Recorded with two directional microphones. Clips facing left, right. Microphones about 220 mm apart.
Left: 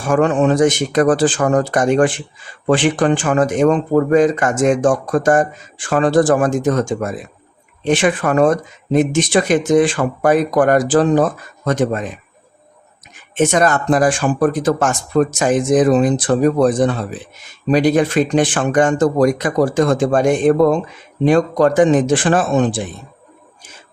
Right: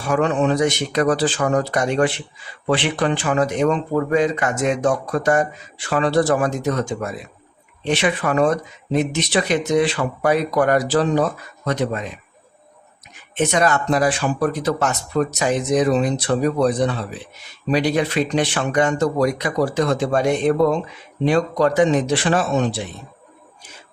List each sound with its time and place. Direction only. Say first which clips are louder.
0.0 s speech: left 4 dB; 50° left (ahead or behind)
13.3 s speech: left 4 dB; 45° left (ahead or behind)